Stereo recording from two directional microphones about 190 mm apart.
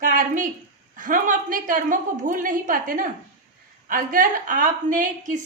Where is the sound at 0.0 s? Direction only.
45° right (ahead or behind).